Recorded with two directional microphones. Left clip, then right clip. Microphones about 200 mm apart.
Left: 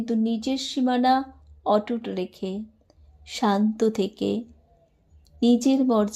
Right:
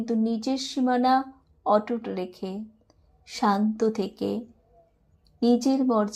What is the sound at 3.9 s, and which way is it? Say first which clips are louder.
Speech: left 3 dB; 40° left (ahead or behind).